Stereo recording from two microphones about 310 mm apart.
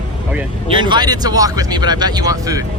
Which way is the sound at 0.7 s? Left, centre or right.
Centre.